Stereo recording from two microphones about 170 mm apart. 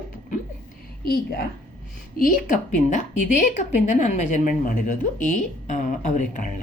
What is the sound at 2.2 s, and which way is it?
Speech, 55° left (ahead or behind).